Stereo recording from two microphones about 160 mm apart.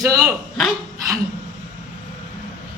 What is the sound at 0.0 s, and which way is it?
Speech, 20° right (ahead or behind).